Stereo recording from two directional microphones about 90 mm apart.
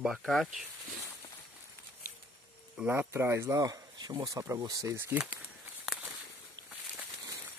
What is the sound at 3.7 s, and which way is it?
Speech, 50° right (ahead or behind).